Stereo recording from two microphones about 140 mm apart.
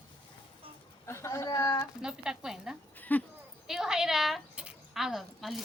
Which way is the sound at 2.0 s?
5° right (ahead or behind).